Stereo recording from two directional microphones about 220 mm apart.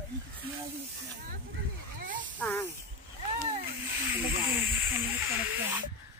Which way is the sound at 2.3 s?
5° left (ahead or behind).